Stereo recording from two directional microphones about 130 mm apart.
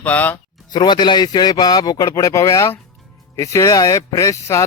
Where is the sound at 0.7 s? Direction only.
35° left (ahead or behind).